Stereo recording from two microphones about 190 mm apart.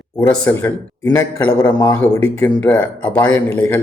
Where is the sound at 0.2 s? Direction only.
15° left (ahead or behind).